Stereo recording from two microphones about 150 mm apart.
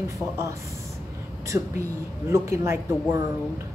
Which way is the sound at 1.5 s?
20° right (ahead or behind).